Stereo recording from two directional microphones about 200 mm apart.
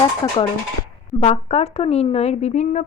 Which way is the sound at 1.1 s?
30° left (ahead or behind).